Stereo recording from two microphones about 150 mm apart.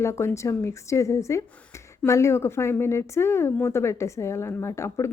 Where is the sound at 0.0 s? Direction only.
20° left (ahead or behind).